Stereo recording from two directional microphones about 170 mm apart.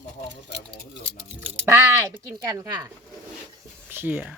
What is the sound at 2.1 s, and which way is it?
Speech, 25° right (ahead or behind).